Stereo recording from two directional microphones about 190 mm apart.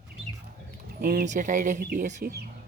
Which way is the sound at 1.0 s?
45° right (ahead or behind).